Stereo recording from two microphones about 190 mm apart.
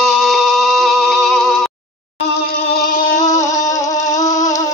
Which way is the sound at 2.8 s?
45° left (ahead or behind).